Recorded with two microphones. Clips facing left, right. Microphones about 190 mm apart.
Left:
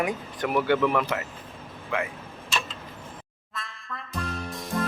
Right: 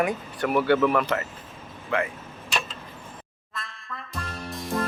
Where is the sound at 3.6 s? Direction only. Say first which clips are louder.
Even; centre (ahead or behind).